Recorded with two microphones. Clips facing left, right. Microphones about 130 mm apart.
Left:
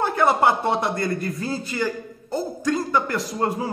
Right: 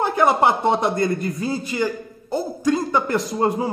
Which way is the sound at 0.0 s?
15° right (ahead or behind).